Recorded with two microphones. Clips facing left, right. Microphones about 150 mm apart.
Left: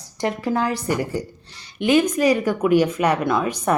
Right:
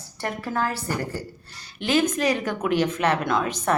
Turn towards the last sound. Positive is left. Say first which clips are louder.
# left 3 dB
turn(degrees=10)  # may be behind; listen again after turning